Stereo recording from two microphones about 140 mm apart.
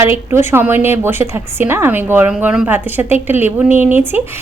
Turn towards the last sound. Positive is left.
turn(degrees=-15)  # may be behind; listen again after turning